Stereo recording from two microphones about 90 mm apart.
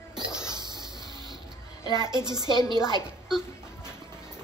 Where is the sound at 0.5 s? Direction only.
55° right (ahead or behind).